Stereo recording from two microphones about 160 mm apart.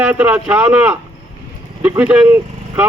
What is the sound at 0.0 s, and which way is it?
Speech, 10° right (ahead or behind).